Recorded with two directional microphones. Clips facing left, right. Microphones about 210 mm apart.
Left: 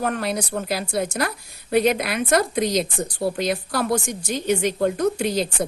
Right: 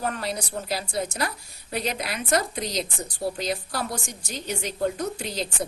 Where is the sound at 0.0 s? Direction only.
60° left (ahead or behind).